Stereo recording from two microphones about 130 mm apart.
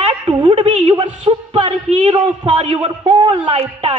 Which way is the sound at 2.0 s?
45° right (ahead or behind).